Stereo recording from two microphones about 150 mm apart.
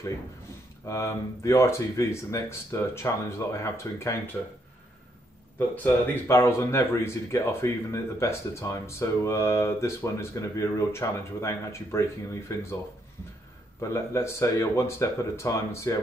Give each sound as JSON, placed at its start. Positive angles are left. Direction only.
{"t": 0.8, "sound": "speech", "side_deg": 20}
{"t": 6.1, "sound": "speech", "side_deg": 15}
{"t": 13.7, "sound": "speech", "side_deg": 20}